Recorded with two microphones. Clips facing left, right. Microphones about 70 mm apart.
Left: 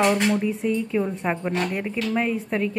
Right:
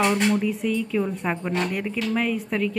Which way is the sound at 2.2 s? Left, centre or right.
Left.